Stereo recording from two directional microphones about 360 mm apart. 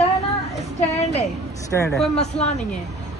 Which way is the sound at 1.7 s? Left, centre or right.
Centre.